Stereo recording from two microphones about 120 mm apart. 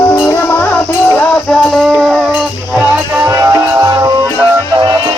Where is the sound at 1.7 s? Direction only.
5° right (ahead or behind).